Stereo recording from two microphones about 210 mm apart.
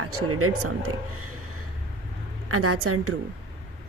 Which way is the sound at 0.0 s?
90° right.